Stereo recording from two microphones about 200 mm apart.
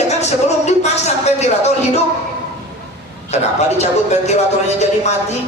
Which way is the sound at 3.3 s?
35° left (ahead or behind).